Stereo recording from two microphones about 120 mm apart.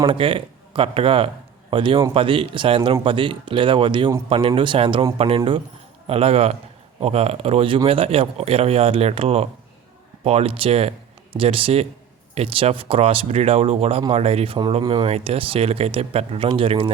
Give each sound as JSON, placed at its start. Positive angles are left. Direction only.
{"t": 0.0, "sound": "speech", "side_deg": -45}